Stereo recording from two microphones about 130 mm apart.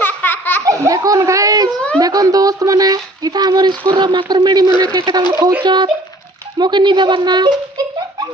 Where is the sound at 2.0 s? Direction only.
30° right (ahead or behind).